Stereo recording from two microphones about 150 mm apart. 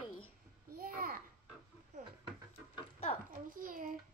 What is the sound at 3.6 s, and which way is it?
Speech, 65° right (ahead or behind).